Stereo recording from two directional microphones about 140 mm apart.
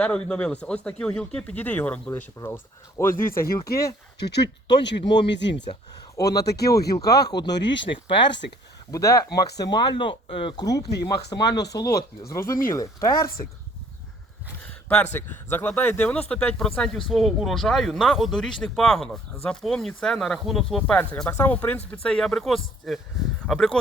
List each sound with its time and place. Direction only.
0.0 s speech: 5° left (ahead or behind)
3.7 s speech: 90° left
6.1 s speech: 25° left (ahead or behind)
8.9 s speech: 25° left (ahead or behind)
14.8 s speech: 10° left (ahead or behind)